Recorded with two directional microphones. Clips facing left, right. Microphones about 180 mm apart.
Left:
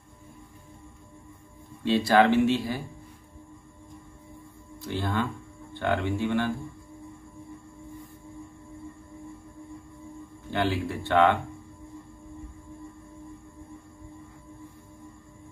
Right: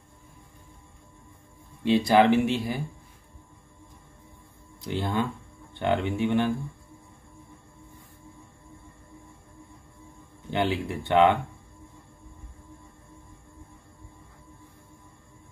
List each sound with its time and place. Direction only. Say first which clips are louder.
1.9 s speech: right 1 dB; 15° right (ahead or behind)
4.8 s speech: right 1 dB; 20° right (ahead or behind)
10.5 s speech: right 1 dB; 20° right (ahead or behind)